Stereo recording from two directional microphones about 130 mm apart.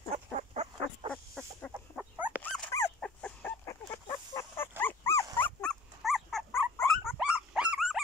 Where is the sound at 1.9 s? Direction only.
15° right (ahead or behind).